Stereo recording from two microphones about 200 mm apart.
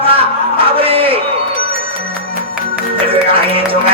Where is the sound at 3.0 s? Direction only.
25° right (ahead or behind).